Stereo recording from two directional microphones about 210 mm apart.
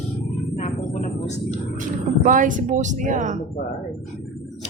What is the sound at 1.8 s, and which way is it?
Speech, 40° right (ahead or behind).